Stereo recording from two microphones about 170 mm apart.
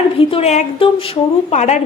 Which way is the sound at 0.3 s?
35° left (ahead or behind).